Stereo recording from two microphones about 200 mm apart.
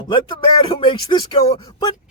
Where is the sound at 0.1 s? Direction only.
25° left (ahead or behind).